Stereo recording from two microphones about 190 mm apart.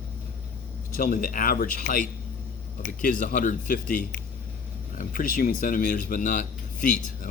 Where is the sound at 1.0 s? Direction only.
45° left (ahead or behind).